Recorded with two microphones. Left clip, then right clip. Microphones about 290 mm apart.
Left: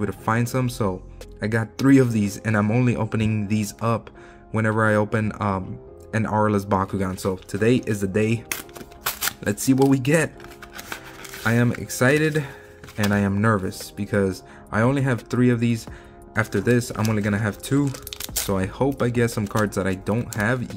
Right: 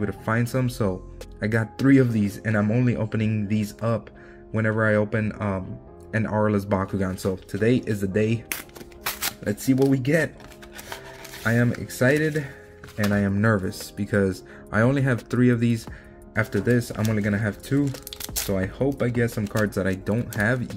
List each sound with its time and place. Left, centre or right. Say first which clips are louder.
0.0 s speech: left 2 dB; centre
11.4 s speech: left 1 dB; centre